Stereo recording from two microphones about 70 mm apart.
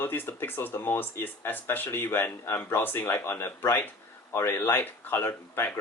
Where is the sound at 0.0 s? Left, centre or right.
Left.